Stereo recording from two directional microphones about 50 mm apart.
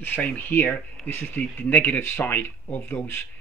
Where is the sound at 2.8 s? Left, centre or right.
Left.